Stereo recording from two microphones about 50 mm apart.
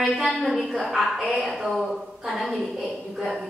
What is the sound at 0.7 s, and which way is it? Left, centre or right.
A woman's voice, centre.